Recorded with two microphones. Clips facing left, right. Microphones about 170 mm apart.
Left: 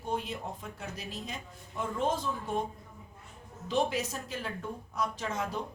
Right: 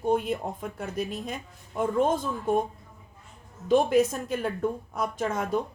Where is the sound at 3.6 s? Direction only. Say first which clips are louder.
Right 9 dB; 55° right (ahead or behind).